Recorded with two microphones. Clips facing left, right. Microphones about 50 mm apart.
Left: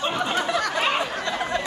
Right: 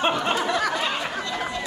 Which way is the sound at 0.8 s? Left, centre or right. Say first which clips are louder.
Left 3 dB; left.